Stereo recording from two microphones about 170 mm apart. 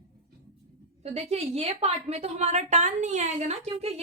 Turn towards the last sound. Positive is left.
turn(degrees=-40)  # may be behind; listen again after turning